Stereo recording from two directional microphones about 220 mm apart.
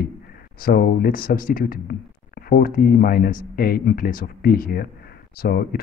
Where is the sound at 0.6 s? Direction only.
40° left (ahead or behind).